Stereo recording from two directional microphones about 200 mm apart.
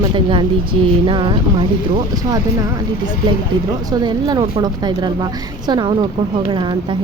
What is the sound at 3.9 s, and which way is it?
A woman's voice, 20° right (ahead or behind).